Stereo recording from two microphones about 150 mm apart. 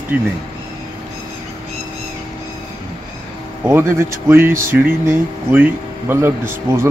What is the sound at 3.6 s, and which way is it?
Speech, 15° right (ahead or behind).